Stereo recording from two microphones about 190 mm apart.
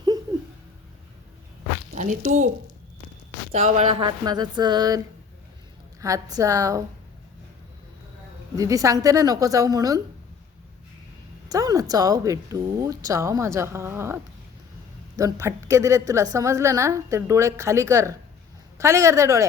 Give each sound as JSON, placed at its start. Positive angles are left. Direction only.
{"t": 2.0, "sound": "speech", "side_deg": -40}
{"t": 3.5, "sound": "speech", "side_deg": -35}
{"t": 6.0, "sound": "a woman's voice", "side_deg": -15}
{"t": 8.5, "sound": "speech", "side_deg": -20}
{"t": 11.4, "sound": "a woman's voice", "side_deg": -20}